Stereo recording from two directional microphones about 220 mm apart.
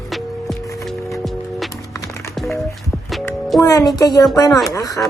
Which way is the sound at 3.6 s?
15° left (ahead or behind).